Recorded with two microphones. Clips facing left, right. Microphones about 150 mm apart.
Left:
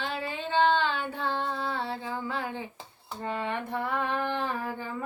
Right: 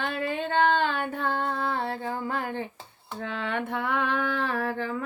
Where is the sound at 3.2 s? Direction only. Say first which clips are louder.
Right 1 dB; 90° right.